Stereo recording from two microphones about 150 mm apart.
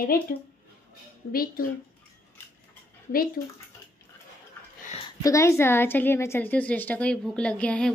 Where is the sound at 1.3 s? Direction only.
80° left.